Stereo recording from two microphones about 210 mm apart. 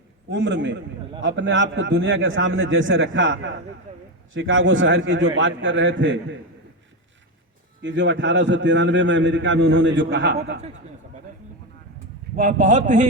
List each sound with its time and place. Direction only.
0.3 s a man's voice: 60° right (ahead or behind)
7.8 s a man's voice: 60° right (ahead or behind)
12.4 s a man's voice: 40° right (ahead or behind)